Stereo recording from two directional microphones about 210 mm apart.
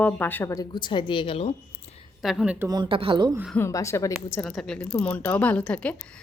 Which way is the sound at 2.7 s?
20° right (ahead or behind).